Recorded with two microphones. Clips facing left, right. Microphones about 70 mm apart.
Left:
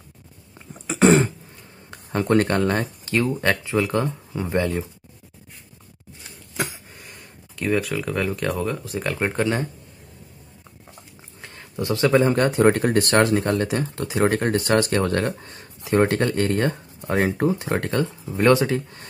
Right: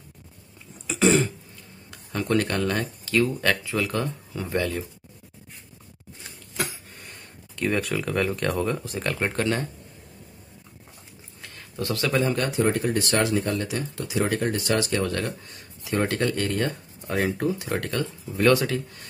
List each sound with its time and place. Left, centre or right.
0.6 s throat clearing: left
1.9 s speech: left
7.0 s speech: centre
9.3 s speech: centre
11.4 s speech: left
12.4 s speech: left